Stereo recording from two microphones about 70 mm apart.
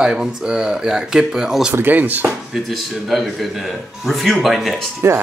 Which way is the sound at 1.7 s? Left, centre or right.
Right.